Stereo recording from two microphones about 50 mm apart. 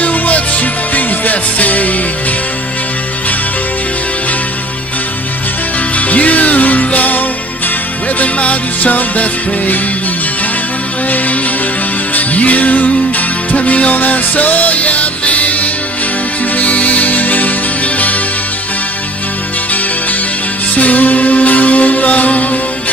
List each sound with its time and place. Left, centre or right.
0.0 s music: left
5.9 s music: left
12.1 s music: left
20.7 s music: left